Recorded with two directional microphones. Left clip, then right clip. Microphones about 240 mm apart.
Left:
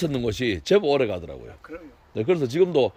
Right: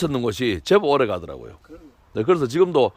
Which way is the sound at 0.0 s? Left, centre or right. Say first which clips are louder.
Right 3 dB; centre.